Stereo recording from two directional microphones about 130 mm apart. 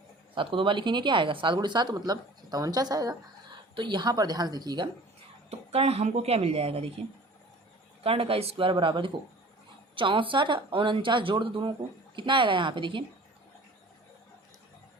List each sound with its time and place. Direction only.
0.3 s speech: 40° right (ahead or behind)
5.5 s speech: 50° right (ahead or behind)
8.0 s speech: 45° right (ahead or behind)